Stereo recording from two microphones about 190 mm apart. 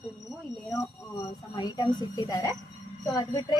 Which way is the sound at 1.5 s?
20° left (ahead or behind).